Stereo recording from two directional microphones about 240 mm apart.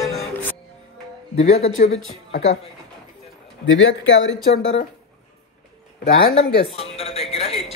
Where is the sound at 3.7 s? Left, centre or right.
Left.